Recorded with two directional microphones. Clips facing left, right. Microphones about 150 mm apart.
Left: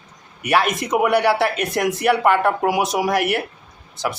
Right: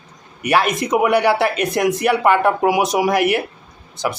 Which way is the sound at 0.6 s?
Centre (ahead or behind).